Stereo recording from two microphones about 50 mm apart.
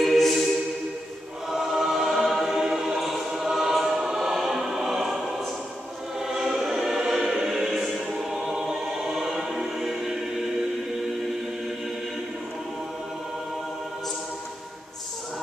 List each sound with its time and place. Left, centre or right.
0.0 s music: centre
1.5 s choir: centre